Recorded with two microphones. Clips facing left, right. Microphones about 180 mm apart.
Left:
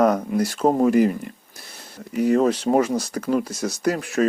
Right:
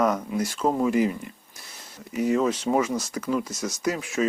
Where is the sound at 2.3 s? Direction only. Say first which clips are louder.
Left 5 dB; 55° left (ahead or behind).